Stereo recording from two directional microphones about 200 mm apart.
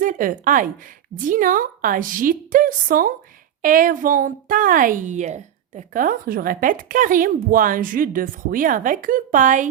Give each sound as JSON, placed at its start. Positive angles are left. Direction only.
{"t": 0.0, "sound": "a woman's voice", "side_deg": -40}